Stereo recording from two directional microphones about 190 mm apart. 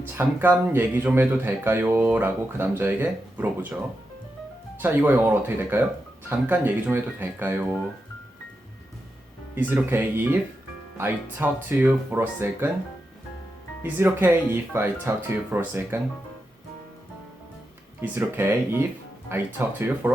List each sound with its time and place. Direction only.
0.2 s speech: 10° right (ahead or behind)
4.8 s speech: 10° right (ahead or behind)
9.6 s speech: 10° right (ahead or behind)
13.8 s speech: 10° right (ahead or behind)
18.0 s speech: 10° right (ahead or behind)